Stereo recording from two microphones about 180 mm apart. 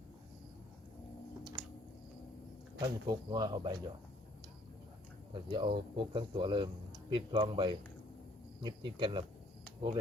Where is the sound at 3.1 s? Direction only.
20° right (ahead or behind).